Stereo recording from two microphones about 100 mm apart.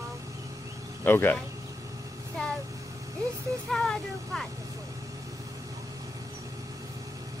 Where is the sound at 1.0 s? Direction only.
20° left (ahead or behind).